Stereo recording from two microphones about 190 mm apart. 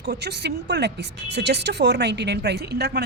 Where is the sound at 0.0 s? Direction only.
60° right (ahead or behind).